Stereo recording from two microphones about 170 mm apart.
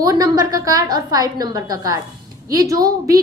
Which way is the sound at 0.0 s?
20° right (ahead or behind).